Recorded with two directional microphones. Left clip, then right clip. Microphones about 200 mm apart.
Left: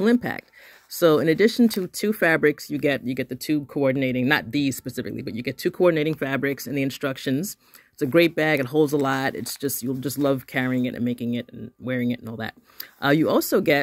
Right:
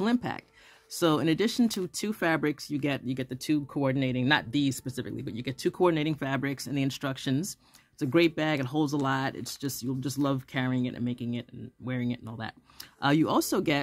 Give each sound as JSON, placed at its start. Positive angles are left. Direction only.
{"t": 0.0, "sound": "speech", "side_deg": 15}